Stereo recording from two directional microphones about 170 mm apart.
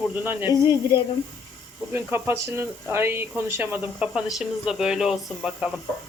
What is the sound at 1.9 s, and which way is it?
Speech, 15° right (ahead or behind).